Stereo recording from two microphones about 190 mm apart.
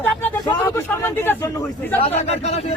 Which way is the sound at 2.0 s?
35° left (ahead or behind).